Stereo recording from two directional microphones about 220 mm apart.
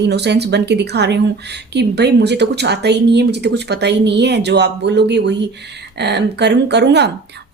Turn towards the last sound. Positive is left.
turn(degrees=-50)  # may be behind; listen again after turning